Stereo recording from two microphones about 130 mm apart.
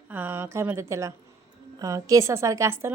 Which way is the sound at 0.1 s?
15° right (ahead or behind).